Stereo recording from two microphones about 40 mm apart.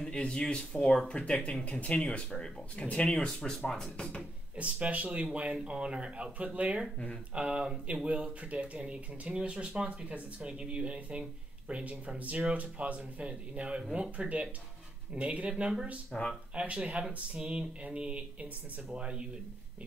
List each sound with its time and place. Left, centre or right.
0.3 s speech: left
1.1 s speech: left
4.6 s speech: right
16.1 s speech: left
16.5 s speech: right